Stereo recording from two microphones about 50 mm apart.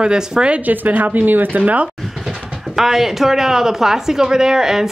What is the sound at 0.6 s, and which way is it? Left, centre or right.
A woman's voice, right.